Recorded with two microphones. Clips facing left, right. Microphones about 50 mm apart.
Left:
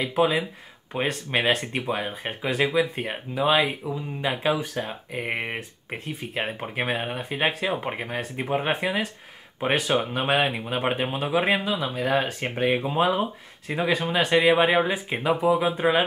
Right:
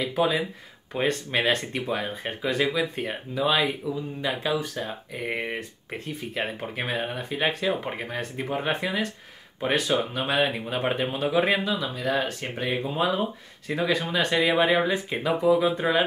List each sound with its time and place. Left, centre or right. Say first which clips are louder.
0.0 s speech: left 2 dB; left
1.3 s speech: left 1 dB; centre; by 5.9 s left
6.0 s speech: left 1 dB; centre
10.1 s speech: left 3 dB; left
10.4 s speech: left 1 dB; centre
11.9 s speech: left 2 dB; left
13.7 s speech: left 1 dB; centre